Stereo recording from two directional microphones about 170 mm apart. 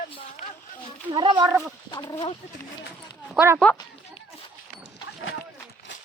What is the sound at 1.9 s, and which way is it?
Speech, 25° left (ahead or behind).